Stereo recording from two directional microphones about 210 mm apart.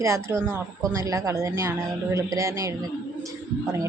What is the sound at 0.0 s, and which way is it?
A woman's voice, 15° right (ahead or behind).